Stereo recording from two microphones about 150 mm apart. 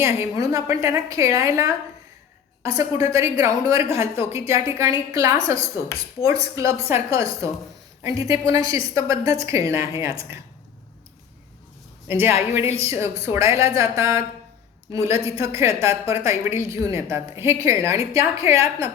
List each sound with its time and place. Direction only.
0.0 s a woman's voice: 20° right (ahead or behind)
12.0 s a woman's voice: 15° right (ahead or behind)